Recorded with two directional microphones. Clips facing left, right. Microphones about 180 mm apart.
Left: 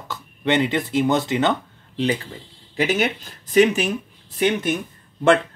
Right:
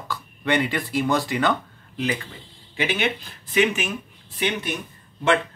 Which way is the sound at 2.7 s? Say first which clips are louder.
Left 4 dB; 40° left (ahead or behind).